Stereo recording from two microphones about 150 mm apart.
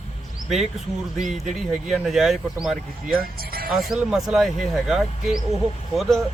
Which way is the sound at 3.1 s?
80° right.